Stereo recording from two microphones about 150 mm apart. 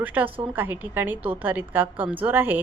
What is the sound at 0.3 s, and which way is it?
Speech, 35° right (ahead or behind).